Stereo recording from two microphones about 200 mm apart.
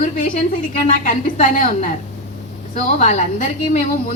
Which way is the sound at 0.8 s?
40° left (ahead or behind).